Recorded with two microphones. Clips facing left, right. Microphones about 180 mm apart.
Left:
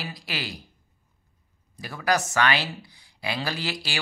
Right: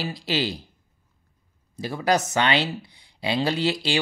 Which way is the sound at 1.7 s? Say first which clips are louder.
Right 3 dB; 25° right (ahead or behind).